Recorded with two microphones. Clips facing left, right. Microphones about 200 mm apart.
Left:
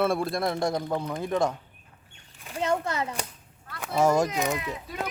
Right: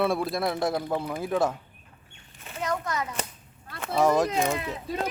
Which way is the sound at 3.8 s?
Centre (ahead or behind).